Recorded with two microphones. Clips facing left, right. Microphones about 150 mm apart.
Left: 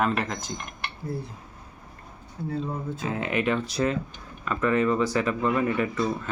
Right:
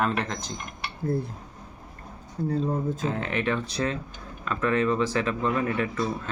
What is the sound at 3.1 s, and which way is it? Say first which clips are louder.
Speech: left 6 dB; 10° left (ahead or behind).